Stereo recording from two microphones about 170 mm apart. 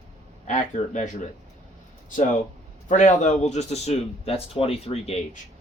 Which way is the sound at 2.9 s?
45° left (ahead or behind).